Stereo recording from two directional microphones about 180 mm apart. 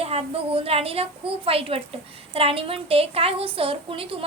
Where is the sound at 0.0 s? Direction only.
35° right (ahead or behind).